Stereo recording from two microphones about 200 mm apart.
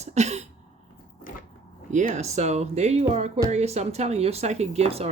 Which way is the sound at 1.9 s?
35° right (ahead or behind).